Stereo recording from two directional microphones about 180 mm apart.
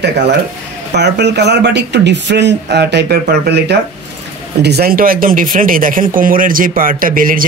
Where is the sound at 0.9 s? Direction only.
70° right (ahead or behind).